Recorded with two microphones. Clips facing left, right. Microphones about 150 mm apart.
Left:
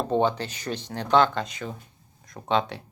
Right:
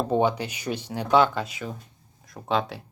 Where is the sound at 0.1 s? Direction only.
10° right (ahead or behind).